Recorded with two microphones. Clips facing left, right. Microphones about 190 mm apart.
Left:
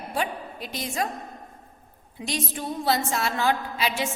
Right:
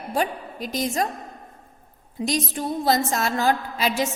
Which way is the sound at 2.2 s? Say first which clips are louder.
Right 5 dB; 35° right (ahead or behind).